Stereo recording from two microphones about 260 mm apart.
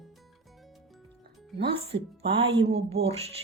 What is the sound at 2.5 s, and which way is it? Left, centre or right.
Speech, right.